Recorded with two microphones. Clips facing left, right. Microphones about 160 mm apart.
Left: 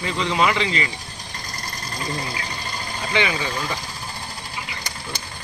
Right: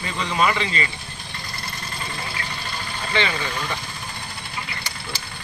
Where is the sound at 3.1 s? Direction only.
15° left (ahead or behind).